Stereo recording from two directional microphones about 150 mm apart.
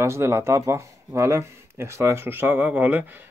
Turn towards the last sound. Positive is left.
turn(degrees=-10)  # may be behind; listen again after turning